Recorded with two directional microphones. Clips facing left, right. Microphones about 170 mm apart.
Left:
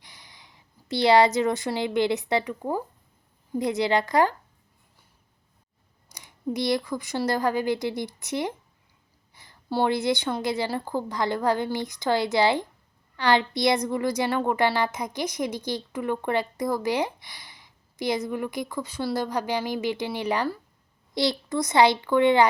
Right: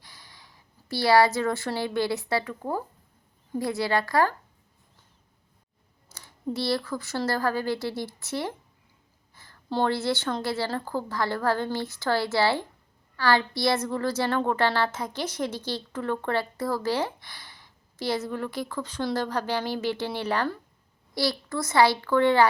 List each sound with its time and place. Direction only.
0.0 s a woman's voice: 20° left (ahead or behind)
6.1 s a woman's voice: 15° left (ahead or behind)